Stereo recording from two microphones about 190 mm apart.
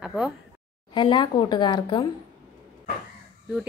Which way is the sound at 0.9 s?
25° left (ahead or behind).